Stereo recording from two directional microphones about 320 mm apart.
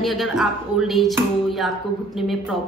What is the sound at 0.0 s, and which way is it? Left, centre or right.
A woman's voice, centre.